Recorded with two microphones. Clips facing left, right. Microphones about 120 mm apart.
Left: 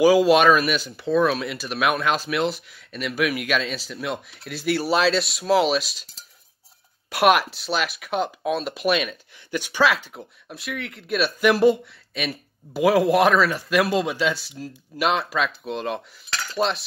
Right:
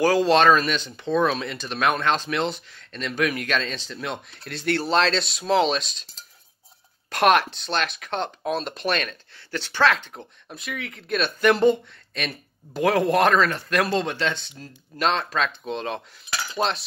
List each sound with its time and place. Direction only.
0.0 s speech: 10° left (ahead or behind)